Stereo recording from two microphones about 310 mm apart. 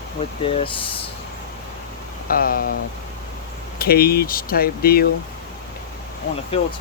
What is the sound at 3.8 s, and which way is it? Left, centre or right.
Speech, left.